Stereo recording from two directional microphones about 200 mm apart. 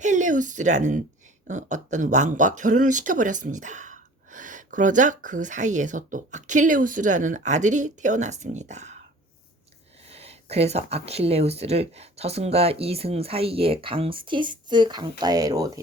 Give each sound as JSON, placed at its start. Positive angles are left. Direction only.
{"t": 0.0, "sound": "speech", "side_deg": -40}
{"t": 10.1, "sound": "speech", "side_deg": -30}